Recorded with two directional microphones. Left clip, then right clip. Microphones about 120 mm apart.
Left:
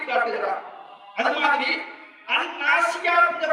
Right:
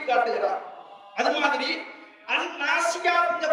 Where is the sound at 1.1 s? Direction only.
50° right (ahead or behind).